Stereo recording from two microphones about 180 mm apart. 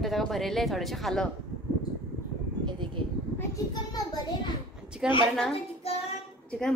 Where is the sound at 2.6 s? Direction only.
25° right (ahead or behind).